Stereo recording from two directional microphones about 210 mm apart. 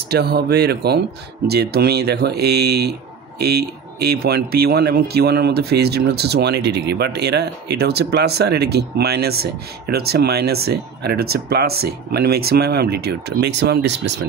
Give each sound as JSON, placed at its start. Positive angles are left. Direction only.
{"t": 0.1, "sound": "speech", "side_deg": -50}